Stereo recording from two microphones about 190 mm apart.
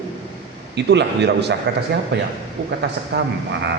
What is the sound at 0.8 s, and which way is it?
Speech, 65° right (ahead or behind).